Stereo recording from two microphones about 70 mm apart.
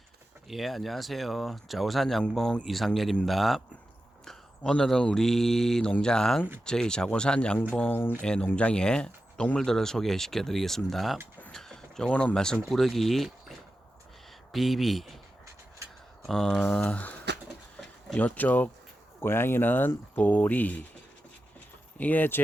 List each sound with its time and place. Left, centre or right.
0.4 s speech: centre
4.3 s speech: centre
7.9 s speech: left
8.2 s speech: centre
11.5 s a sound: centre
12.6 s speech: centre
14.5 s speech: centre
16.2 s speech: centre
16.7 s speech: centre
18.2 s speech: left
19.2 s speech: left
21.9 s speech: left